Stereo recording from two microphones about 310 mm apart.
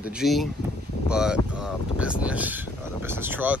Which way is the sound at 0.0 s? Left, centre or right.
Centre.